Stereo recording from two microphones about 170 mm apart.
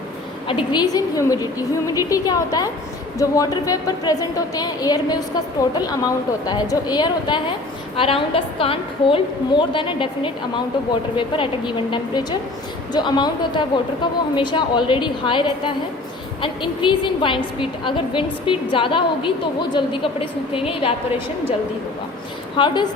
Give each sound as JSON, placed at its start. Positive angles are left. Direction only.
{"t": 0.4, "sound": "a woman's voice", "side_deg": 25}
{"t": 22.5, "sound": "a woman's voice", "side_deg": 25}